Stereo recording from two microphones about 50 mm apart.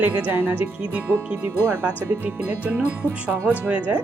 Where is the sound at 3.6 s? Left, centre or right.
Right.